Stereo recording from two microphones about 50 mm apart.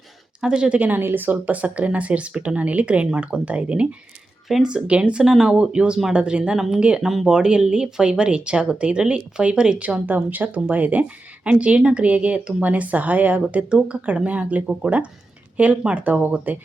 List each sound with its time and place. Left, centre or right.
0.4 s speech: centre
0.8 s speech: right; by 7.0 s centre
7.0 s speech: centre
7.3 s speech: centre; by 16.6 s right